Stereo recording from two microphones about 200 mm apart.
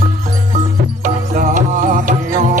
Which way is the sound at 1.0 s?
40° right (ahead or behind).